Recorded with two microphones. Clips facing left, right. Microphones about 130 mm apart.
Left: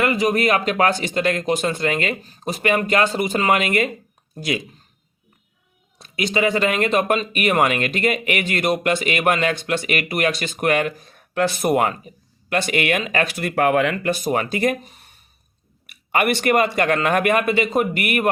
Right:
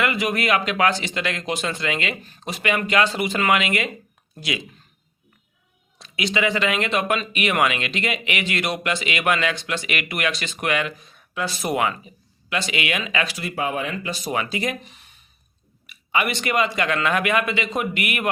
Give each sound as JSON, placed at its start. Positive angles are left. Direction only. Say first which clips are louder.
{"t": 0.0, "sound": "speech", "louder": "left 4 dB", "side_deg": 40}
{"t": 6.0, "sound": "speech", "louder": "left 3 dB", "side_deg": 45}